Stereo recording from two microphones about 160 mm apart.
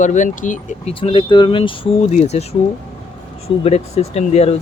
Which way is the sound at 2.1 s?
45° left (ahead or behind).